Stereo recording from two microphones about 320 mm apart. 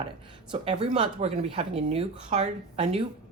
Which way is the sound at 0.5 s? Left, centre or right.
Centre.